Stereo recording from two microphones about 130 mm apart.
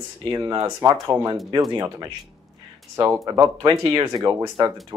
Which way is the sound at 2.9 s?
20° right (ahead or behind).